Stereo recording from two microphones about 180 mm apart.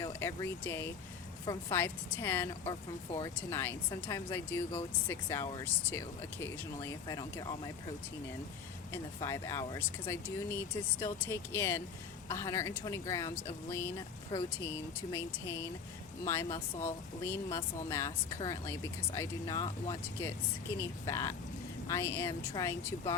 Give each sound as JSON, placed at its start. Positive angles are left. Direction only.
{"t": 0.0, "sound": "speech", "side_deg": 15}
{"t": 8.9, "sound": "speech", "side_deg": 15}